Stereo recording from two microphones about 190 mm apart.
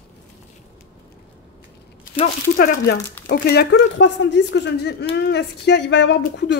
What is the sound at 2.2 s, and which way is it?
Speech, 45° left (ahead or behind).